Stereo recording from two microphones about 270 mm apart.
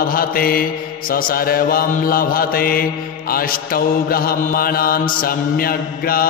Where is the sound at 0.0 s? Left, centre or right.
Left.